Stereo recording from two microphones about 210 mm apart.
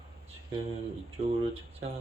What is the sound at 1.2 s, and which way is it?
Speech, 30° right (ahead or behind).